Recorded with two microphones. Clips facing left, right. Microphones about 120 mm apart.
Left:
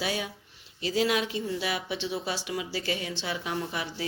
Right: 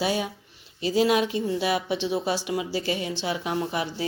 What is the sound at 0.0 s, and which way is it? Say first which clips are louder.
Speech: right 6 dB; 25° right (ahead or behind).